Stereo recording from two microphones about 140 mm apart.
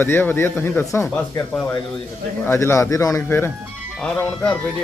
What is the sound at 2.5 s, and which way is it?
A man's voice, 20° left (ahead or behind).